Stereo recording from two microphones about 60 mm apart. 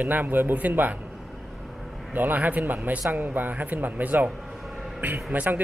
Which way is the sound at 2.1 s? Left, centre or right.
Right.